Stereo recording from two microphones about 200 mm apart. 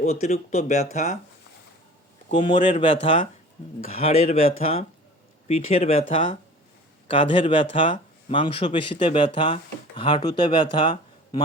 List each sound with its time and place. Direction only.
0.0 s speech: 35° left (ahead or behind)
2.3 s speech: 25° left (ahead or behind)
7.1 s speech: 25° left (ahead or behind)